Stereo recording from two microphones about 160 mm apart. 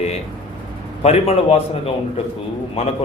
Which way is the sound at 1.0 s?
40° left (ahead or behind).